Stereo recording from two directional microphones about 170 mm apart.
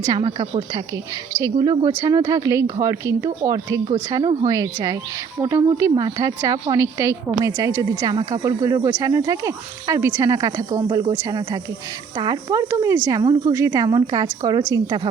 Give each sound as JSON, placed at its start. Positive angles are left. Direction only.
{"t": 0.1, "sound": "speech", "side_deg": -25}